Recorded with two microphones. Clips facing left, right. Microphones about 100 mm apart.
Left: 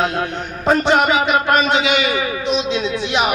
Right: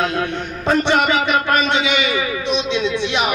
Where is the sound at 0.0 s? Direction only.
5° left (ahead or behind).